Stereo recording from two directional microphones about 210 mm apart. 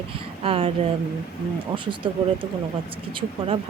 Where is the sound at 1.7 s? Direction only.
25° right (ahead or behind).